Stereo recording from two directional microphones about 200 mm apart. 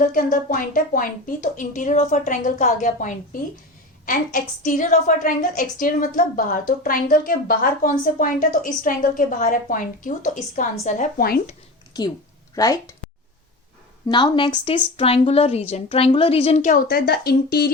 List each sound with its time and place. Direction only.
0.1 s a woman's voice: 45° left (ahead or behind)
11.9 s a woman's voice: 20° left (ahead or behind)
14.1 s a woman's voice: 20° left (ahead or behind); by 17.7 s 50° left (ahead or behind)